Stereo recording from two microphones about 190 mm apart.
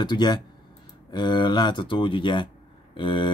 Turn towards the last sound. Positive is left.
turn(degrees=25)  # may be behind; listen again after turning